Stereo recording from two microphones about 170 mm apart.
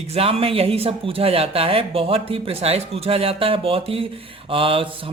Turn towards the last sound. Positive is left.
turn(degrees=-30)  # may be behind; listen again after turning